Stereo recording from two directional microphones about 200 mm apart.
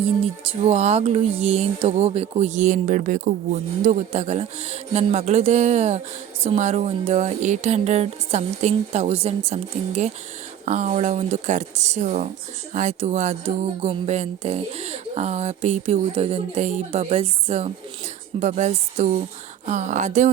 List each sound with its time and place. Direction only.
0.6 s speech: 30° right (ahead or behind)